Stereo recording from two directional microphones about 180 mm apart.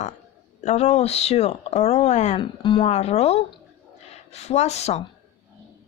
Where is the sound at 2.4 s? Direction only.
25° left (ahead or behind).